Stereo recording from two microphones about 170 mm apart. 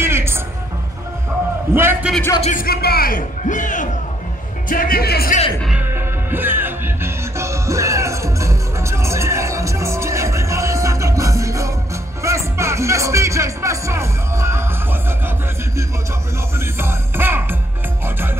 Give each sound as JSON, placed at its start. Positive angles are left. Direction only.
{"t": 0.0, "sound": "music", "side_deg": -15}
{"t": 1.7, "sound": "a man's voice", "side_deg": -10}
{"t": 2.4, "sound": "a man's voice", "side_deg": 55}
{"t": 5.6, "sound": "music", "side_deg": -5}